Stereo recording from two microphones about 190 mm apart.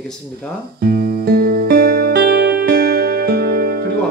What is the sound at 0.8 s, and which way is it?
Music, 55° right (ahead or behind).